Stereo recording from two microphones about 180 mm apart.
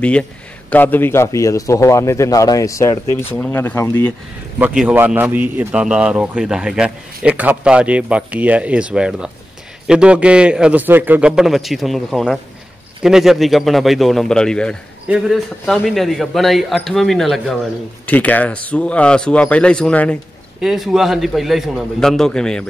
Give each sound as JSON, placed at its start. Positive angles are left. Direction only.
{"t": 0.7, "sound": "a man's voice", "side_deg": 10}
{"t": 4.6, "sound": "a man's voice", "side_deg": -10}